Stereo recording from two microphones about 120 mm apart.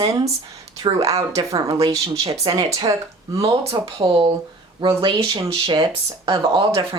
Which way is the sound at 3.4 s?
50° right (ahead or behind).